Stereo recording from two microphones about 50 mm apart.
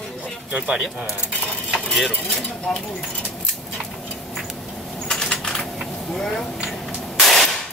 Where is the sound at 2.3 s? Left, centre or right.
Centre.